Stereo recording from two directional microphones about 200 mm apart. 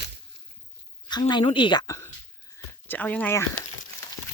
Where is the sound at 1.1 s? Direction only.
20° left (ahead or behind).